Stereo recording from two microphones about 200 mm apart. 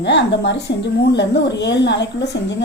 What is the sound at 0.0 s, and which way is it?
A woman's voice, 60° left (ahead or behind).